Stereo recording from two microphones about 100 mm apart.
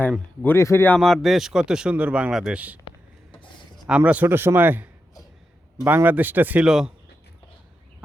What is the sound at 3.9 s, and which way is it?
Speech, 10° right (ahead or behind).